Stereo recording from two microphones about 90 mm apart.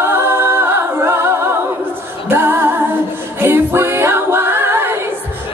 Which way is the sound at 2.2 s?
25° right (ahead or behind).